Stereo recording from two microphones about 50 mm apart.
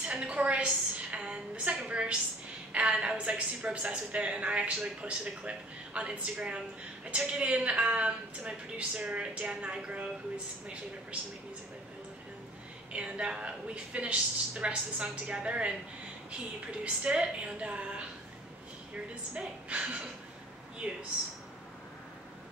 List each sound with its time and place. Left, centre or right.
0.0 s a sound: right
2.7 s a woman's voice: right
12.9 s a woman's voice: right
16.8 s a woman's voice: centre
19.3 s a woman's voice: right